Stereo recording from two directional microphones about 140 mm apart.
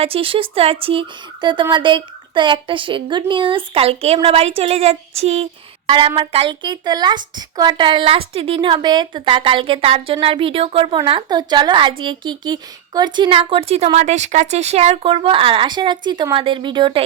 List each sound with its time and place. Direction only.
0.0 s speech: 40° right (ahead or behind)
5.9 s speech: 40° right (ahead or behind)